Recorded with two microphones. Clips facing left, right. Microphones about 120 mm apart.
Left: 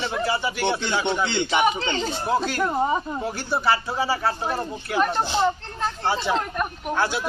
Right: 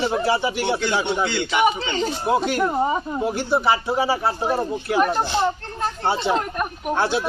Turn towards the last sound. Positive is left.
turn(degrees=-25)  # may be behind; listen again after turning